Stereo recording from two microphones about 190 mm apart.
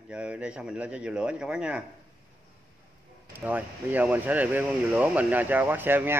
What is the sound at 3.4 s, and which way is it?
A man's voice, 10° right (ahead or behind).